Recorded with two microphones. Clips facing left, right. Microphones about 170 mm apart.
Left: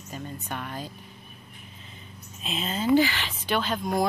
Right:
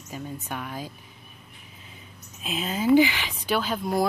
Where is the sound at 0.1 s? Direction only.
5° right (ahead or behind).